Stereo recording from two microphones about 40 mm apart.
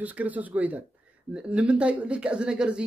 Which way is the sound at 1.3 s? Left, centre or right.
Right.